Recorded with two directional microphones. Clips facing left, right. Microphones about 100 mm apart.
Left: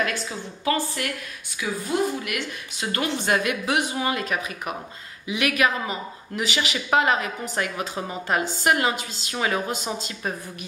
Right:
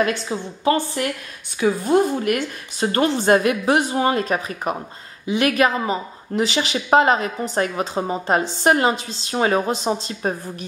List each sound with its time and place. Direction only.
0.0 s a woman's voice: 30° right (ahead or behind)
1.6 s speech: 40° right (ahead or behind)